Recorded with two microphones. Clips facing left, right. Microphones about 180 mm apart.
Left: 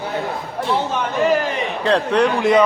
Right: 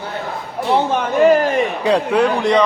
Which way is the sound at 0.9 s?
50° right (ahead or behind).